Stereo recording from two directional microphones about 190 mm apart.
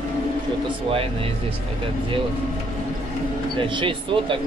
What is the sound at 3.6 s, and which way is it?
Speech, 25° right (ahead or behind).